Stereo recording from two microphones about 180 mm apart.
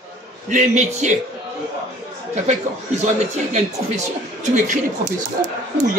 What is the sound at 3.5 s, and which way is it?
Speech, 40° right (ahead or behind).